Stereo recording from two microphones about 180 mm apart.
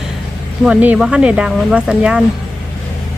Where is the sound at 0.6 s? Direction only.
5° right (ahead or behind).